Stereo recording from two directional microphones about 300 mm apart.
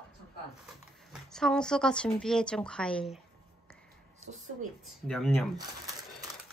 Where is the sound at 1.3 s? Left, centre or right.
Centre.